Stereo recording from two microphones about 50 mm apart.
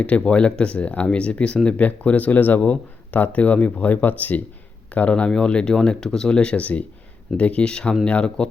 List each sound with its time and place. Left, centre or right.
0.0 s speech: left